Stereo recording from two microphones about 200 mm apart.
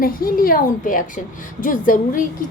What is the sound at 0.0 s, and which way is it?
A woman's voice, 45° left (ahead or behind).